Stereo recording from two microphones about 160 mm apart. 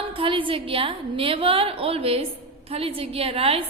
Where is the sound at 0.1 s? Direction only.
35° right (ahead or behind).